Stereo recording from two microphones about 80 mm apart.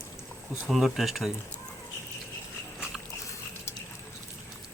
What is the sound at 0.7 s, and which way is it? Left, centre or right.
Speech, centre.